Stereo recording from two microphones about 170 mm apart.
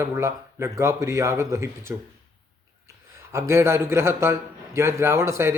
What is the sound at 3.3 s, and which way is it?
Speech, 15° right (ahead or behind).